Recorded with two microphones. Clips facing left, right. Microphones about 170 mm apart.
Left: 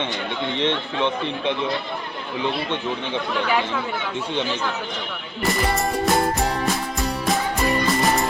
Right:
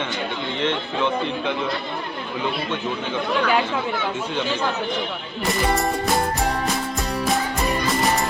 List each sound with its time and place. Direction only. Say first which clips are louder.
0.6 s speech: even; 25° left (ahead or behind)
5.5 s music: right 1 dB; centre (ahead or behind)